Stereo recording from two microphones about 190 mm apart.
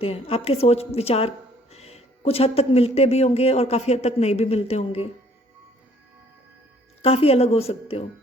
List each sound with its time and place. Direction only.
0.0 s speech: 30° left (ahead or behind)
7.0 s speech: 30° left (ahead or behind)